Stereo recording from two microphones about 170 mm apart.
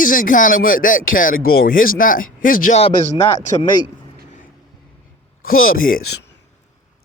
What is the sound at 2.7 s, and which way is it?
Speech, 35° left (ahead or behind).